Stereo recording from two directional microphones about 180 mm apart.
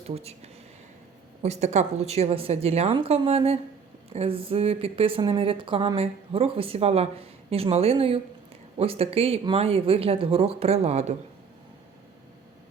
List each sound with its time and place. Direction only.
0.1 s speech: 35° right (ahead or behind)